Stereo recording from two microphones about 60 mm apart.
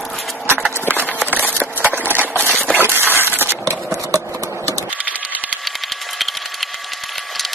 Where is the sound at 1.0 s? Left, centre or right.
Right.